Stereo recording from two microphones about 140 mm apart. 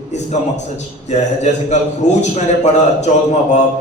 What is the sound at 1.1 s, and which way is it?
A man's voice, 55° left (ahead or behind).